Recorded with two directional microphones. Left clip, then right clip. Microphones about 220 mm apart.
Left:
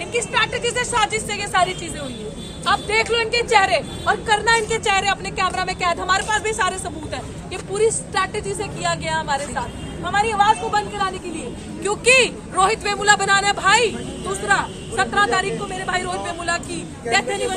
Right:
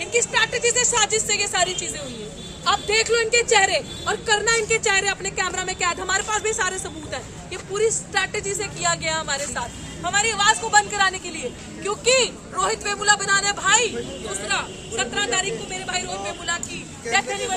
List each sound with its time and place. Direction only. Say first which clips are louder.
0.0 s speech: even; 25° right (ahead or behind)
2.6 s a woman's voice: left 1 dB; 20° right (ahead or behind); by 11.1 s 10° left (ahead or behind)
11.8 s speech: left 4 dB; 50° left (ahead or behind); by 13.9 s 35° left (ahead or behind)
14.4 s speech: left 7 dB; 25° left (ahead or behind)